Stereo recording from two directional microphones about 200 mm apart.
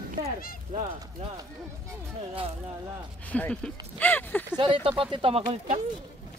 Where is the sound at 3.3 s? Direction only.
5° left (ahead or behind).